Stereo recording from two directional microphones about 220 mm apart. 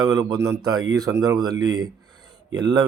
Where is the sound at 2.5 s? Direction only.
20° right (ahead or behind).